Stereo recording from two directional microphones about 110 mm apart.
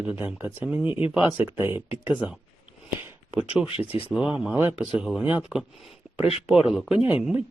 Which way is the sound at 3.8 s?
15° right (ahead or behind).